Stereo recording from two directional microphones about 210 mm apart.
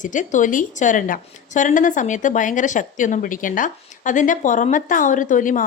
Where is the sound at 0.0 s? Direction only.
35° left (ahead or behind).